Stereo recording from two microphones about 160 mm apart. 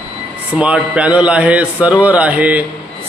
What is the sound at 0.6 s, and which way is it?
A man's voice, 5° right (ahead or behind).